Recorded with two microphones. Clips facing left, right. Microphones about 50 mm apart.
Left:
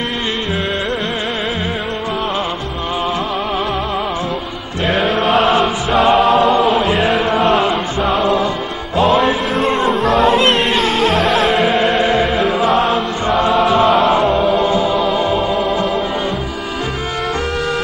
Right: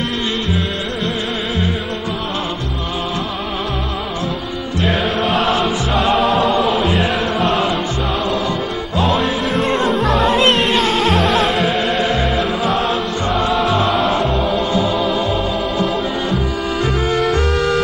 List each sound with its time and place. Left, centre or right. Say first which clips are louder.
4.8 s music: left 3 dB; centre
6.9 s chant: left 3 dB; centre
7.3 s music: left 3 dB; centre
12.0 s music: left 3 dB; left
12.9 s music: left 3 dB; centre